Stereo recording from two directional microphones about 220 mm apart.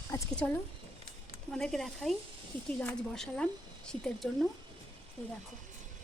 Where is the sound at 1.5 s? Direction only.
Centre (ahead or behind).